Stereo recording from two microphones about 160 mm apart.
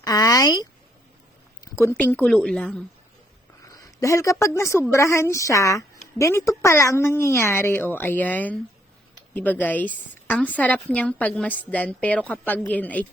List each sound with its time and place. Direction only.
0.0 s a sound: 25° left (ahead or behind)
1.6 s a woman's voice: 20° left (ahead or behind)
3.7 s a woman's voice: 20° left (ahead or behind)